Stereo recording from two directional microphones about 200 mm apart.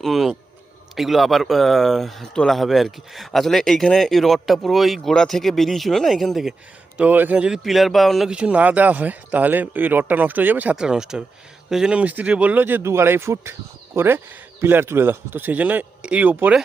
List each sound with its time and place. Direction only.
0.0 s speech: centre (ahead or behind)